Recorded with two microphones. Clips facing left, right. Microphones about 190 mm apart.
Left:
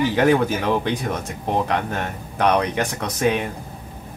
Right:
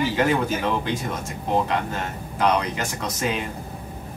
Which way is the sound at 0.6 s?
65° left (ahead or behind).